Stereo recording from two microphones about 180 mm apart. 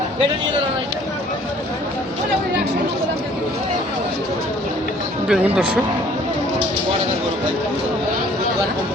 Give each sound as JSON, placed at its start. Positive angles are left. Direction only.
{"t": 5.3, "sound": "speech", "side_deg": -5}